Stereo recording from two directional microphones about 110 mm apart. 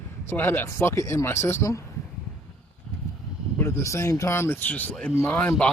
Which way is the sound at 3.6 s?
25° left (ahead or behind).